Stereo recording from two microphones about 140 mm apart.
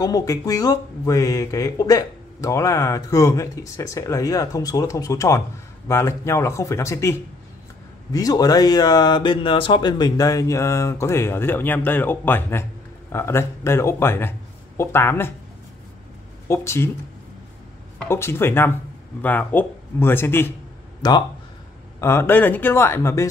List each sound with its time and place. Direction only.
0.0 s speech: 25° left (ahead or behind)
16.4 s speech: 20° left (ahead or behind)
18.0 s speech: 15° left (ahead or behind)
21.0 s speech: 30° left (ahead or behind)
22.0 s speech: 15° left (ahead or behind)